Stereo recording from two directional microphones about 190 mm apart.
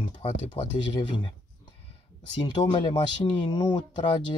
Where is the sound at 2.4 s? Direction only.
25° left (ahead or behind).